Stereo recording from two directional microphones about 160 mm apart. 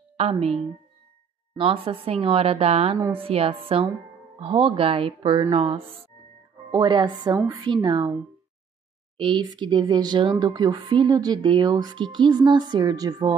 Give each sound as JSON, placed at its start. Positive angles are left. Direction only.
{"t": 0.2, "sound": "a woman's voice", "side_deg": -40}
{"t": 6.7, "sound": "a woman's voice", "side_deg": -25}
{"t": 9.1, "sound": "a woman's voice", "side_deg": -30}